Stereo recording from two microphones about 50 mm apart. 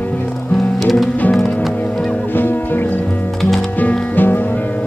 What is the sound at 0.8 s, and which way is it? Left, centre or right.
Music, centre.